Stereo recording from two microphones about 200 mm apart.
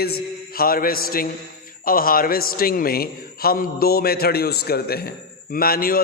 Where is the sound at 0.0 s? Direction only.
50° left (ahead or behind).